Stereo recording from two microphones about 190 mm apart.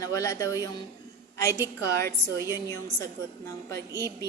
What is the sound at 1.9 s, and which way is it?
Speech, 55° right (ahead or behind).